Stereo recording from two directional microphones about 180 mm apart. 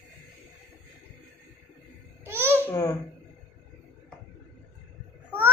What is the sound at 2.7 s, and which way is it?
Speech, 15° left (ahead or behind).